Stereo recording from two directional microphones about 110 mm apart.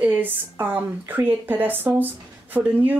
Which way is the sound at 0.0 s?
15° right (ahead or behind).